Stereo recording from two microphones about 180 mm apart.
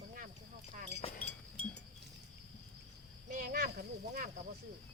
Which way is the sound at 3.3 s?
50° right (ahead or behind).